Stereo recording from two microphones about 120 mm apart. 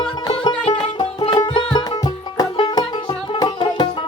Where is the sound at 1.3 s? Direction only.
35° left (ahead or behind).